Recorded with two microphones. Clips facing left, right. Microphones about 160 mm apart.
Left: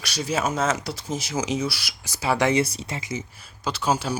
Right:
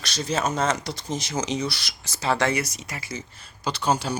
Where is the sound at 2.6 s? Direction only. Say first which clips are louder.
Left 6 dB; 30° left (ahead or behind).